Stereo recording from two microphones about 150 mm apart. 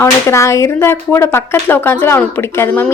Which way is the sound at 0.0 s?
20° left (ahead or behind).